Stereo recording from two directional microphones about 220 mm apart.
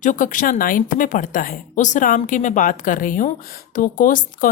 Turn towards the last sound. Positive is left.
turn(degrees=40)  # may be behind; listen again after turning